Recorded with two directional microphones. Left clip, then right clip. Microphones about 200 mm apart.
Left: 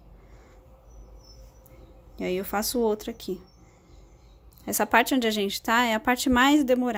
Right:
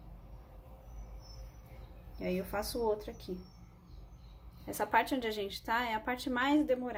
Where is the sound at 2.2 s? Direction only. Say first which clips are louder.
Left 8 dB; 55° left (ahead or behind).